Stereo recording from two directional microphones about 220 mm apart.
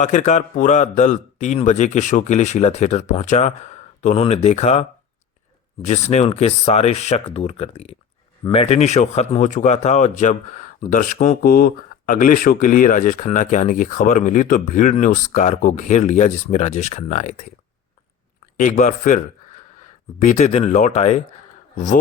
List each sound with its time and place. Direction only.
0.0 s speech: 35° left (ahead or behind)
18.5 s speech: 35° left (ahead or behind)